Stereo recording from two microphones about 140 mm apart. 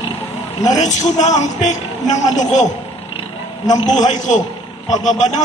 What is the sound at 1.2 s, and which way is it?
A man's voice, 55° left (ahead or behind).